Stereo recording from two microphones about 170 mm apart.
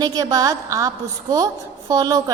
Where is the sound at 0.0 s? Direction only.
25° right (ahead or behind).